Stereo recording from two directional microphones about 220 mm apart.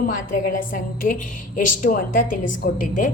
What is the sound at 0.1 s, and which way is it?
A woman's voice, 35° left (ahead or behind).